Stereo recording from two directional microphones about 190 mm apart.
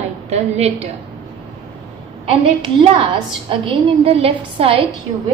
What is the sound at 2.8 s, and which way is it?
A woman's voice, 25° right (ahead or behind).